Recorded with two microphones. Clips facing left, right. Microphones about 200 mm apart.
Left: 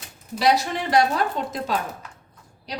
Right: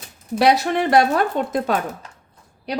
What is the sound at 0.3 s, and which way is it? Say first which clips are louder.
A woman's voice: right 4 dB; 60° right (ahead or behind).